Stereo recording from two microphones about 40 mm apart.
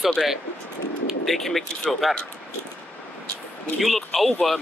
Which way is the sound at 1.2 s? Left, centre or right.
Centre.